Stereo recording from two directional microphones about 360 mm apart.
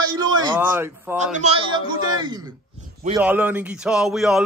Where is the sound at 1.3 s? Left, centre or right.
Centre.